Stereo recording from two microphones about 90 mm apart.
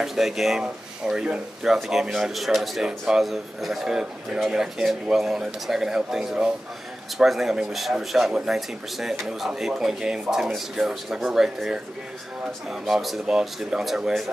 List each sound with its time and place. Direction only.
0.0 s speech: 5° right (ahead or behind)
12.8 s speech: centre (ahead or behind)